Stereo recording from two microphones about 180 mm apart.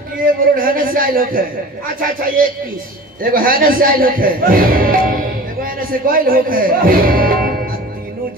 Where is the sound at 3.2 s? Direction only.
50° right (ahead or behind).